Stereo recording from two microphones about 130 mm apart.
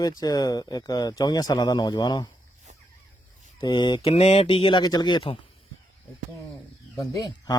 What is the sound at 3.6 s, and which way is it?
Speech, 40° left (ahead or behind).